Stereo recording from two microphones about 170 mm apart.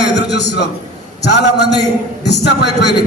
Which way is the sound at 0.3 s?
90° left.